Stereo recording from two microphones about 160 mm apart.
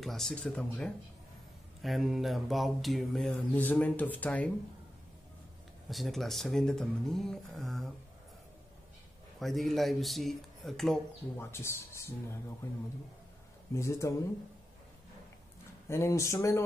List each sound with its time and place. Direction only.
0.0 s mantra: centre (ahead or behind)
5.9 s mantra: centre (ahead or behind)
9.4 s mantra: centre (ahead or behind)
11.3 s speech: 15° left (ahead or behind)
13.7 s speech: 20° left (ahead or behind)
15.9 s speech: 15° left (ahead or behind)